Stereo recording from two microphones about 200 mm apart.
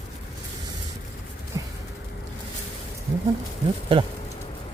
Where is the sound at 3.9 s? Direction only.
25° right (ahead or behind).